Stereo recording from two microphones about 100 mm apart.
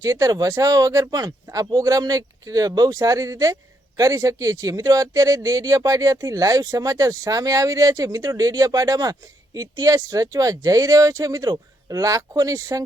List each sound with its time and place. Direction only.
0.0 s speech: 35° right (ahead or behind)